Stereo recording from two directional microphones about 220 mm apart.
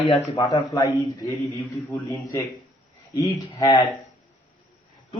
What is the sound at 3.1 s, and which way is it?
Speech, 15° left (ahead or behind).